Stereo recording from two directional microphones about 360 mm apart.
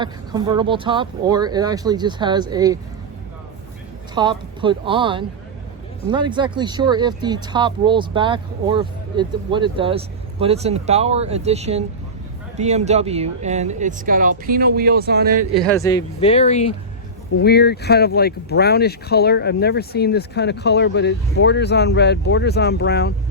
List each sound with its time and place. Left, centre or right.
0.0 s speech: centre
4.1 s speech: centre
15.5 s speech: centre; by 23.1 s left